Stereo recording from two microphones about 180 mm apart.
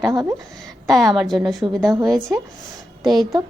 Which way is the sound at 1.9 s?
20° right (ahead or behind).